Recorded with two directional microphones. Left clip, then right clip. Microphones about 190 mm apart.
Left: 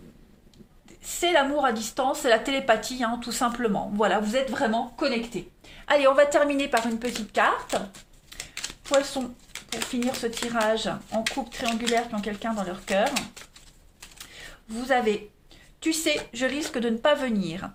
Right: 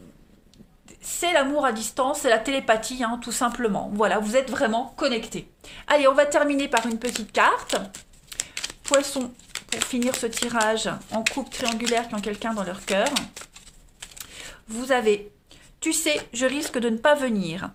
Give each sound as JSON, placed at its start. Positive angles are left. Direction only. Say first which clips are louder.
{"t": 1.0, "sound": "speech", "louder": "right 1 dB", "side_deg": -25}
{"t": 5.8, "sound": "speech", "louder": "right 1 dB", "side_deg": -25}
{"t": 7.0, "sound": "speech", "louder": "right 3 dB", "side_deg": -30}
{"t": 8.3, "sound": "a sound", "louder": "right 4 dB", "side_deg": -35}
{"t": 9.8, "sound": "speech", "louder": "right 2 dB", "side_deg": -35}
{"t": 14.3, "sound": "a sound", "louder": "right 2 dB", "side_deg": -30}
{"t": 15.8, "sound": "speech", "louder": "right 1 dB", "side_deg": -25}